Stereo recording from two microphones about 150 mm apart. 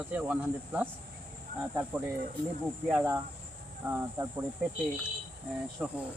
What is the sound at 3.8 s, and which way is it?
Speech, 15° right (ahead or behind).